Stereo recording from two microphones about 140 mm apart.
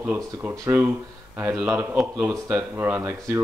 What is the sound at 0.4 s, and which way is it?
Speech, 15° right (ahead or behind).